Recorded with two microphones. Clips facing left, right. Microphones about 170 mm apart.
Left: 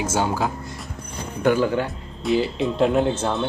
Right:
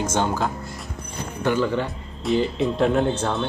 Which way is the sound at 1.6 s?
Centre (ahead or behind).